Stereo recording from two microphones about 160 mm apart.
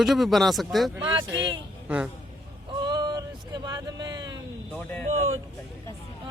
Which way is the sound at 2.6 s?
25° right (ahead or behind).